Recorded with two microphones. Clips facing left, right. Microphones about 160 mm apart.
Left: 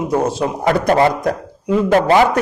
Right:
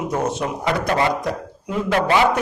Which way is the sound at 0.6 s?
50° left (ahead or behind).